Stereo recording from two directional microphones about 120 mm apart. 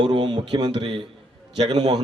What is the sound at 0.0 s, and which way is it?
A man's voice, 40° right (ahead or behind).